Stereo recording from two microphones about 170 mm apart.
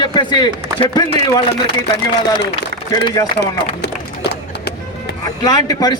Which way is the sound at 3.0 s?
20° left (ahead or behind).